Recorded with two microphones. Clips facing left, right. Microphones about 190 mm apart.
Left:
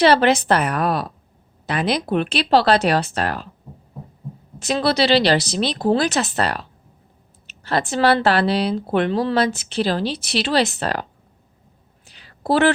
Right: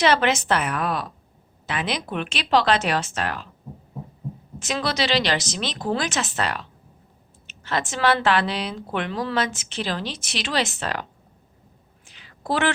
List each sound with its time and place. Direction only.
0.0 s speech: 35° left (ahead or behind)
4.6 s speech: 35° left (ahead or behind)
12.0 s a sound: 35° left (ahead or behind)